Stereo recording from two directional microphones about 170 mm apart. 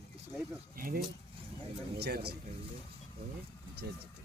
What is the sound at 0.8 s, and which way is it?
Speech, 60° right (ahead or behind).